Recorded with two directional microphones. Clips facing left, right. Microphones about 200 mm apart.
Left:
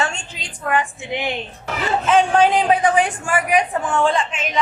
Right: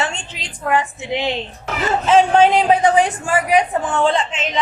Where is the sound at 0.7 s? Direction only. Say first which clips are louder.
Right 2 dB; 25° right (ahead or behind).